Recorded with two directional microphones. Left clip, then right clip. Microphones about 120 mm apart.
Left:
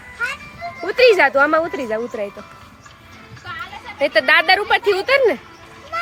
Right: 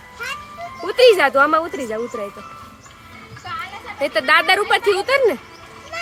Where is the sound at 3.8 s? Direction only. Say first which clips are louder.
Left 4 dB; 5° left (ahead or behind).